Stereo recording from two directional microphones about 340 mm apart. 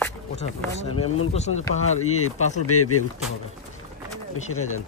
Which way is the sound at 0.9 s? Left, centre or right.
Left.